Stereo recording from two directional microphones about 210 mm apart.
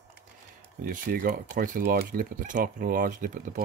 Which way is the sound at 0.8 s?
40° right (ahead or behind).